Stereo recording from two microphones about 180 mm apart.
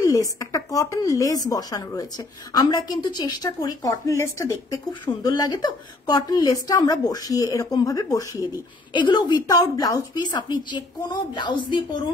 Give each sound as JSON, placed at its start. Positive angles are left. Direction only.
{"t": 0.0, "sound": "a woman's voice", "side_deg": 20}